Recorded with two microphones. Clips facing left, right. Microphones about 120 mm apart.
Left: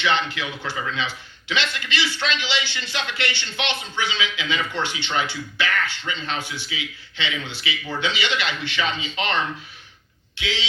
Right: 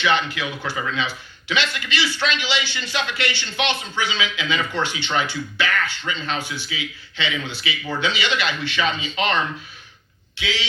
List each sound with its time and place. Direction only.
0.0 s a man's voice: 20° left (ahead or behind)